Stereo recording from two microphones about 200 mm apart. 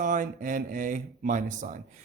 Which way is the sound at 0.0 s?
40° right (ahead or behind).